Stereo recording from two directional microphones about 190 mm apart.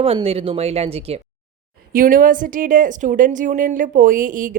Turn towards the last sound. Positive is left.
turn(degrees=-45)  # may be behind; listen again after turning